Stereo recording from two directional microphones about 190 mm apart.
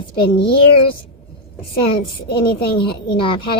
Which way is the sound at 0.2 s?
25° left (ahead or behind).